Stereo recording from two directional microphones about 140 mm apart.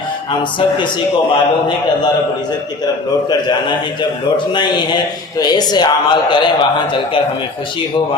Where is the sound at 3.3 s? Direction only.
30° left (ahead or behind).